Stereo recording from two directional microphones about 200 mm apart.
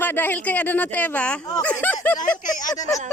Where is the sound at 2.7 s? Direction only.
15° left (ahead or behind).